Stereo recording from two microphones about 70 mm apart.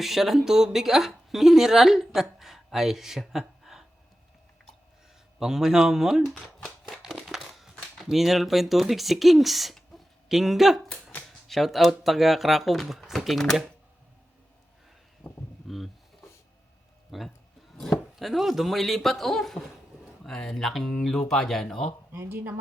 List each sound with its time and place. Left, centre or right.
0.0 s speech: centre
5.4 s speech: centre
15.2 s a sound: centre
15.6 s speech: centre
17.1 s a man's voice: centre
22.1 s speech: right